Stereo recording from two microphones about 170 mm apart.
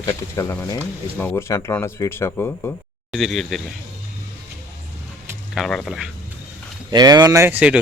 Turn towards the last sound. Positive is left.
turn(degrees=-10)  # may be behind; listen again after turning